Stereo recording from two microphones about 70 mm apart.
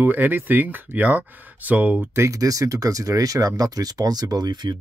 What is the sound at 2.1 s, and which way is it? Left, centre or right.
Speech, right.